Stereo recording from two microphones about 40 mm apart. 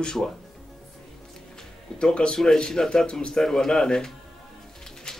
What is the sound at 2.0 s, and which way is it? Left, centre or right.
A man's voice, left.